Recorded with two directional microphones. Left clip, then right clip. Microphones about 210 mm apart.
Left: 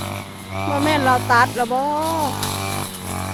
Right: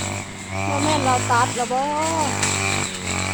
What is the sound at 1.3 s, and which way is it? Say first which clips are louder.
Speech: left 4 dB; 30° left (ahead or behind).